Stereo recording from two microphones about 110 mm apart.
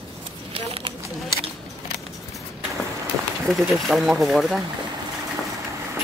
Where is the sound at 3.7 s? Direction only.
Centre (ahead or behind).